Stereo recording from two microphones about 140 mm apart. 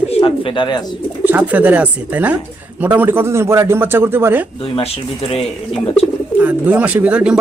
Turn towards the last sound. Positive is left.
turn(degrees=-10)  # may be behind; listen again after turning